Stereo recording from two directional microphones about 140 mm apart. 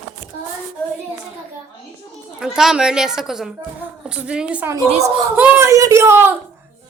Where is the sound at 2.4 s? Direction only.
5° right (ahead or behind).